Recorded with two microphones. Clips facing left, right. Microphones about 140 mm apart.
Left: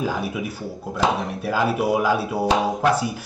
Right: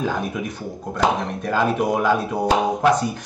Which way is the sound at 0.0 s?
5° left (ahead or behind).